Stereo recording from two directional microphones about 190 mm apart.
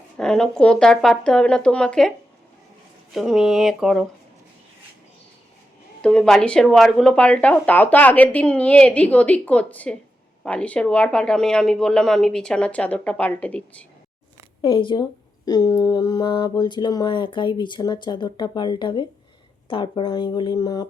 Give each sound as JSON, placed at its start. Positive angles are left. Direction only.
{"t": 0.2, "sound": "speech", "side_deg": 5}
{"t": 6.0, "sound": "speech", "side_deg": 5}
{"t": 14.6, "sound": "a sound", "side_deg": 25}